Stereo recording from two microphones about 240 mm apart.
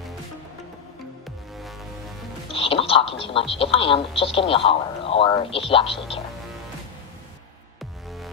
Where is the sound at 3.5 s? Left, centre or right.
Left.